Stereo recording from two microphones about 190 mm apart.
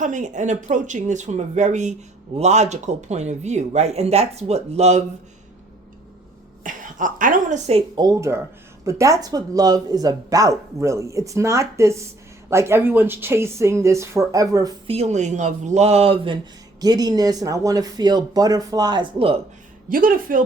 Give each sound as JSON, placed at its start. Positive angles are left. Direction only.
{"t": 0.0, "sound": "speech", "side_deg": -40}
{"t": 6.6, "sound": "speech", "side_deg": -45}
{"t": 14.8, "sound": "speech", "side_deg": -35}
{"t": 19.9, "sound": "speech", "side_deg": -50}